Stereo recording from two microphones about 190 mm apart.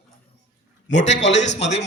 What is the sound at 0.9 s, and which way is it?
Speech, 40° left (ahead or behind).